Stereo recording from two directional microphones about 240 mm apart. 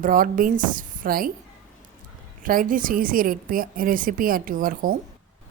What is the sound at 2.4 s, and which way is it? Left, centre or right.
Speech, right.